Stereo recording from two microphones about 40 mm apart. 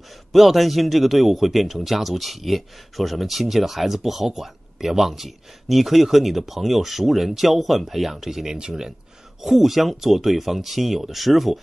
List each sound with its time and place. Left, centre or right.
0.3 s a man's voice: centre
8.5 s a man's voice: centre